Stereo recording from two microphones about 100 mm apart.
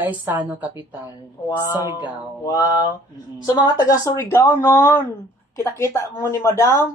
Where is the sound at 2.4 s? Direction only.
35° left (ahead or behind).